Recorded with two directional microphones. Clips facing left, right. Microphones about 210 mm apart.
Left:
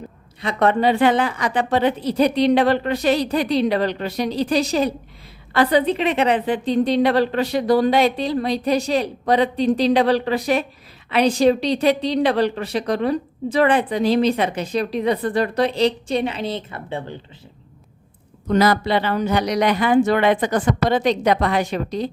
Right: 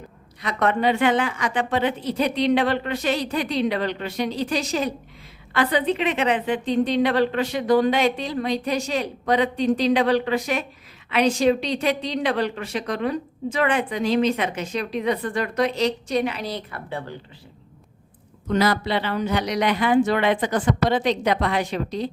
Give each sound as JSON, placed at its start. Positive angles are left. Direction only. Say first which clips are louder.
{"t": 0.4, "sound": "a woman's voice", "louder": "left 4 dB", "side_deg": 30}
{"t": 18.4, "sound": "a woman's voice", "louder": "left 4 dB", "side_deg": 40}